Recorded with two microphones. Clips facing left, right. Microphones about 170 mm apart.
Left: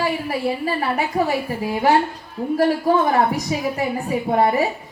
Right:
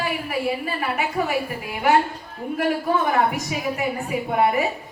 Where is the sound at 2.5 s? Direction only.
35° left (ahead or behind).